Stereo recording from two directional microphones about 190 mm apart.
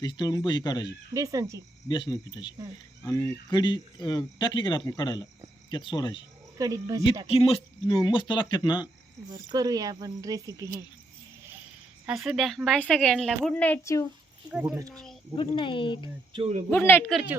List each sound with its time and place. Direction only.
0.0 s speech: 20° left (ahead or behind)
1.1 s speech: 15° right (ahead or behind)
1.9 s speech: 25° left (ahead or behind)
6.6 s speech: 20° right (ahead or behind)
7.3 s speech: 30° left (ahead or behind)
9.3 s speech: 20° right (ahead or behind)
12.0 s speech: 5° right (ahead or behind); by 14.1 s 15° left (ahead or behind)
14.5 s speech: 5° right (ahead or behind)
15.4 s speech: 25° left (ahead or behind)
16.3 s speech: 30° right (ahead or behind)
16.6 s a man's voice: 10° left (ahead or behind)
17.1 s speech: centre (ahead or behind)